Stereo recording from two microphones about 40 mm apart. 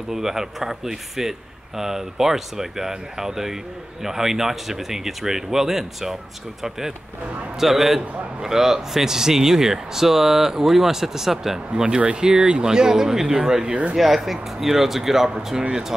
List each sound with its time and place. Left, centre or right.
0.1 s speech: centre
7.5 s a man's voice: centre
11.7 s speech: right
13.9 s speech: centre